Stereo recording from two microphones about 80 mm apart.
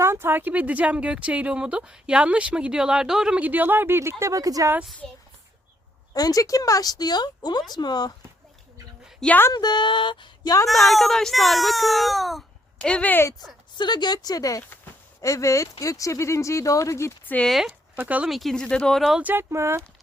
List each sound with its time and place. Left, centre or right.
0.0 s speech: right; by 3.4 s centre
3.4 s speech: right
5.0 s speech: centre
6.1 s speech: left
9.5 s speech: left
10.7 s speech: centre
12.8 s speech: centre
13.7 s speech: left
17.4 s speech: centre
18.0 s speech: centre
18.3 s speech: centre
19.2 s speech: right
19.5 s speech: right